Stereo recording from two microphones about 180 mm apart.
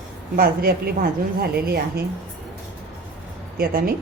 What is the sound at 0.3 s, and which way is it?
A woman's voice, 55° right (ahead or behind).